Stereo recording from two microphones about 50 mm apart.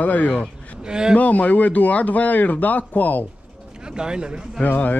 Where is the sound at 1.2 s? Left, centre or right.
Left.